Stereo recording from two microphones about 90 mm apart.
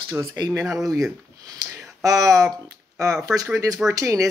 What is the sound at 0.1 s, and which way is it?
Speech, 45° right (ahead or behind).